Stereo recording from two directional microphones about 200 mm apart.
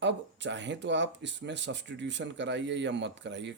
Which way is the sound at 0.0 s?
60° right (ahead or behind).